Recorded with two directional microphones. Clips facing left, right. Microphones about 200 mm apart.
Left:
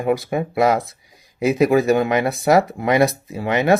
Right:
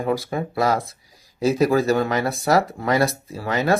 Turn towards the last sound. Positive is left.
turn(degrees=20)  # may be behind; listen again after turning